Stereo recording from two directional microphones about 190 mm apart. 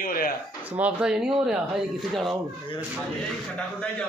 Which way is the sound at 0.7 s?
5° right (ahead or behind).